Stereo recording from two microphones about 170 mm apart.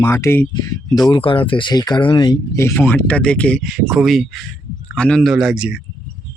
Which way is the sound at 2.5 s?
15° left (ahead or behind).